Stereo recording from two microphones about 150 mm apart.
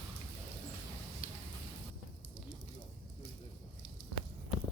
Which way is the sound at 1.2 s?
70° left (ahead or behind).